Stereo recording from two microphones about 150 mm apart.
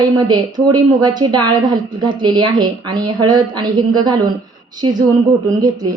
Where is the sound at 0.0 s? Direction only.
30° right (ahead or behind).